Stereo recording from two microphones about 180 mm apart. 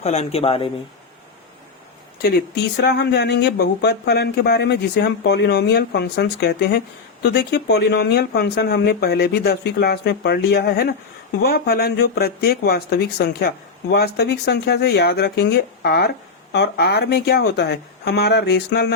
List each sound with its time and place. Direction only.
0.0 s speech: 40° left (ahead or behind)
2.8 s speech: 70° left (ahead or behind)